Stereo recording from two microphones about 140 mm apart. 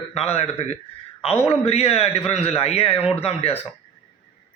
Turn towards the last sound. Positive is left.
turn(degrees=45)  # may be behind; listen again after turning